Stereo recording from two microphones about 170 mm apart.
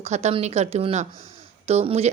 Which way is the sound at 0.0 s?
40° right (ahead or behind).